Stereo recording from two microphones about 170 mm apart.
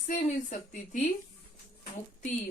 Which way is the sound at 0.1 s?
45° left (ahead or behind).